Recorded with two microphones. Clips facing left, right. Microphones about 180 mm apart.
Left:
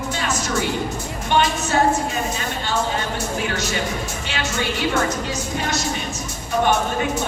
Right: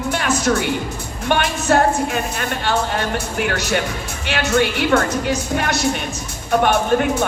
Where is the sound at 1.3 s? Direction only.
60° right (ahead or behind).